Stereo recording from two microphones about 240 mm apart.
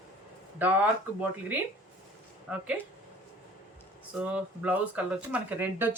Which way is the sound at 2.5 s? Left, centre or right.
Centre.